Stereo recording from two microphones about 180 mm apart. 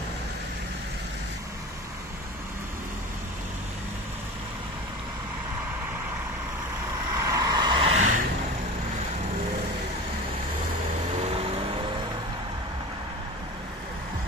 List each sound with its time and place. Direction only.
7.2 s vehicle: 20° right (ahead or behind); by 8.2 s 40° right (ahead or behind)
11.1 s vehicle: 35° right (ahead or behind)